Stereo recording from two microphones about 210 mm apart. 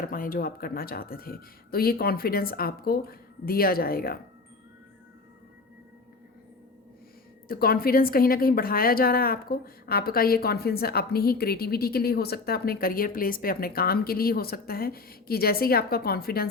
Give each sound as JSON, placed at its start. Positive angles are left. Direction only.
{"t": 0.0, "sound": "a woman's voice", "side_deg": 40}
{"t": 7.4, "sound": "a woman's voice", "side_deg": 45}